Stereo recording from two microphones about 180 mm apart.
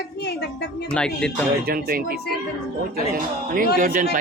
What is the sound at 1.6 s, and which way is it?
Speech, 55° right (ahead or behind).